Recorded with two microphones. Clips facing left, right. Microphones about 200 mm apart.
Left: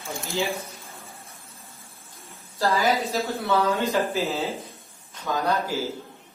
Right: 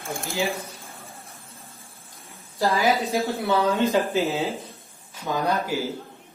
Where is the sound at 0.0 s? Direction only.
55° right (ahead or behind).